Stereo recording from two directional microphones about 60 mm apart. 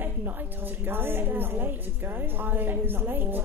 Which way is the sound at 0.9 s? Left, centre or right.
Right.